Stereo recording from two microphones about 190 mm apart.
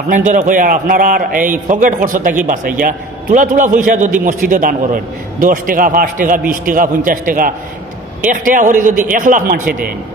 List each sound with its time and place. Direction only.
0.1 s a man's voice: 40° right (ahead or behind)